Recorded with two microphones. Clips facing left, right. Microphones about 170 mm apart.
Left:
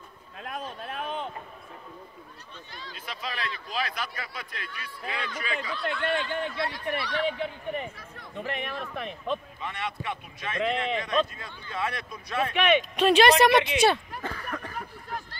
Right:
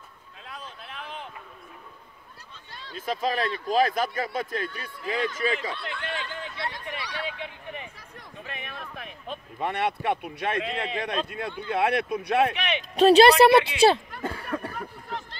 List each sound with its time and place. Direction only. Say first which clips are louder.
0.4 s a sound: left 6 dB; 60° left (ahead or behind)
3.1 s speech: right 9 dB; 45° right (ahead or behind)
5.4 s speech: right 5 dB; 30° right (ahead or behind)
5.9 s speech: left 6 dB; 50° left (ahead or behind)
6.7 s speech: left 5 dB; 15° right (ahead or behind)
7.3 s speech: left 6 dB; 50° left (ahead or behind)
8.4 s speech: left 7 dB; 65° left (ahead or behind)
9.6 s speech: right 7 dB; 60° right (ahead or behind)
12.5 s speech: left 7 dB; 50° left (ahead or behind)
12.9 s speech: right 7 dB; 35° right (ahead or behind)